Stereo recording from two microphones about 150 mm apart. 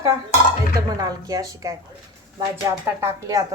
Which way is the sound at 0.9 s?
25° right (ahead or behind).